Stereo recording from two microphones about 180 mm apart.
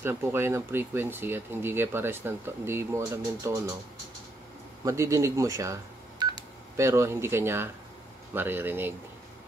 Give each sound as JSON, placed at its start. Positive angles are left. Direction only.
{"t": 0.0, "sound": "speech", "side_deg": -15}
{"t": 4.8, "sound": "speech", "side_deg": -15}